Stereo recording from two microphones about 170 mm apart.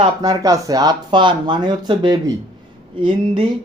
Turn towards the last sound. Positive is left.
turn(degrees=-30)  # may be behind; listen again after turning